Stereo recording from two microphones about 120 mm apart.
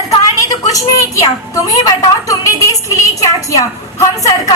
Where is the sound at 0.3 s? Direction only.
30° left (ahead or behind).